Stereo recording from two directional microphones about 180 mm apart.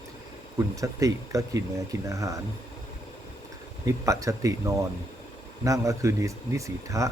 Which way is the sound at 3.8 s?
20° right (ahead or behind).